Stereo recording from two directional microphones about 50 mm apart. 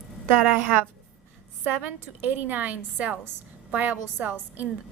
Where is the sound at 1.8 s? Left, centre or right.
Right.